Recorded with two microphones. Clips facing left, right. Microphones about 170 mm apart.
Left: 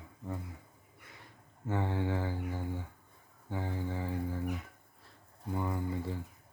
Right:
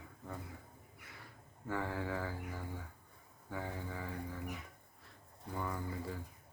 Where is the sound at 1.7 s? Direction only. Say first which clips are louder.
Left 5 dB; 25° left (ahead or behind).